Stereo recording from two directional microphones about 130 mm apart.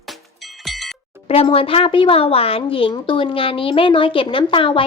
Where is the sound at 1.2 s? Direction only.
50° left (ahead or behind).